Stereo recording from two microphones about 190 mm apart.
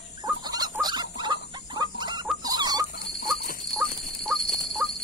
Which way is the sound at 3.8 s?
Centre (ahead or behind).